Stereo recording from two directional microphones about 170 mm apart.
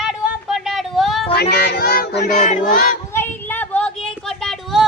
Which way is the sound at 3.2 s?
10° left (ahead or behind).